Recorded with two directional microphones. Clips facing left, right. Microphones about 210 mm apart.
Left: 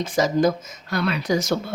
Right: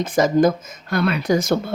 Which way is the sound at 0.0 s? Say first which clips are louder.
Right 3 dB; 55° right (ahead or behind).